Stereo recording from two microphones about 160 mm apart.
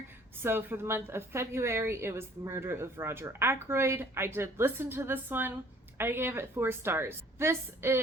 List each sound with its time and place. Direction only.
0.4 s a woman's voice: 15° right (ahead or behind)